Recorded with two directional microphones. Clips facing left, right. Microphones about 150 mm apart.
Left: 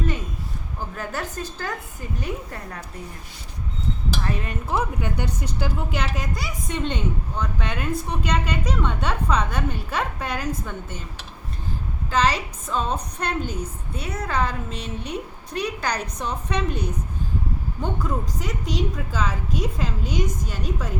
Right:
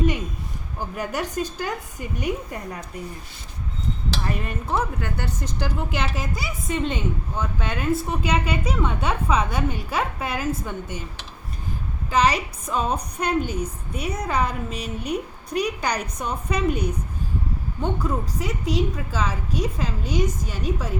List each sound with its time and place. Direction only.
0.9 s a woman's voice: 15° right (ahead or behind)
4.2 s speech: 5° right (ahead or behind)
4.7 s a woman's voice: 15° left (ahead or behind)
5.6 s a woman's voice: centre (ahead or behind)
12.1 s a woman's voice: 10° right (ahead or behind)